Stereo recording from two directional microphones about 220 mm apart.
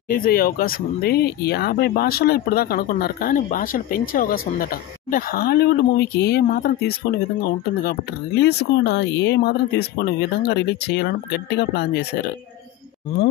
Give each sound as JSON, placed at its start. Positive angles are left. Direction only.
{"t": 0.1, "sound": "speech", "side_deg": 40}